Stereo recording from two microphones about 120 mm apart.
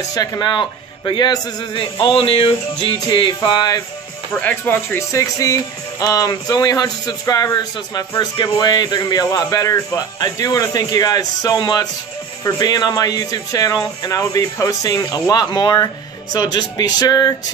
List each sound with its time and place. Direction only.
0.1 s speech: 30° left (ahead or behind); by 2.5 s 50° left (ahead or behind)
3.1 s music: 40° left (ahead or behind)
3.3 s speech: 35° left (ahead or behind)
4.3 s speech: 15° left (ahead or behind); by 17.3 s 35° left (ahead or behind)